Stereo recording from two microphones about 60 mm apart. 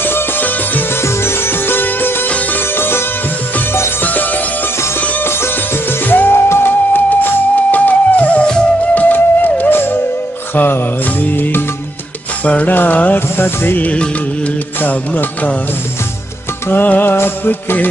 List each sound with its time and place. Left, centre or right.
0.0 s music: left
4.0 s music: left
6.0 s music: left
8.9 s music: left
16.8 s music: left